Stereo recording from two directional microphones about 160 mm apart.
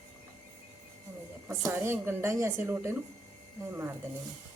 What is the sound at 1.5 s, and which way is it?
Speech, 20° right (ahead or behind).